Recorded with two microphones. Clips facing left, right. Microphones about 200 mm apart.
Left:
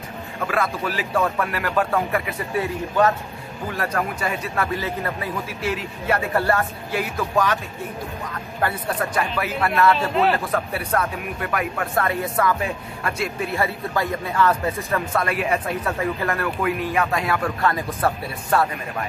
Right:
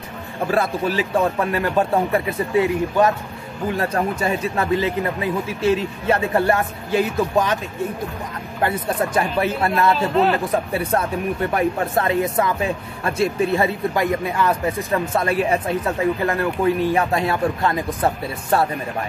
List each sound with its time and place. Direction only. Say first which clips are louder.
0.5 s a man's voice: right 4 dB; 30° right (ahead or behind)
8.5 s a man's voice: right 3 dB; 20° right (ahead or behind)